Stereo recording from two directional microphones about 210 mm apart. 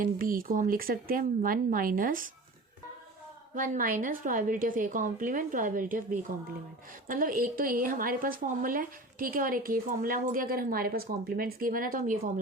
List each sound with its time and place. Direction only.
0.0 s a woman's voice: 40° right (ahead or behind)
3.5 s a woman's voice: 40° right (ahead or behind)